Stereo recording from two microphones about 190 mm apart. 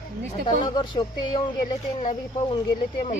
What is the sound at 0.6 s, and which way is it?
Speech, 25° left (ahead or behind).